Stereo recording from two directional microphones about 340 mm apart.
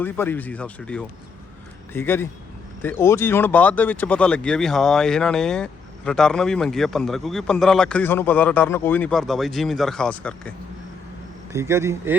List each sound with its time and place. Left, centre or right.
0.0 s a man's voice: centre
11.5 s speech: centre